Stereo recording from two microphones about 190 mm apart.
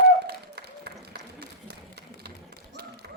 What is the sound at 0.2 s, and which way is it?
Run, 60° right (ahead or behind).